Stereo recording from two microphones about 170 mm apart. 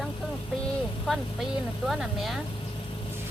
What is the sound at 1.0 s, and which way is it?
Speech, centre (ahead or behind).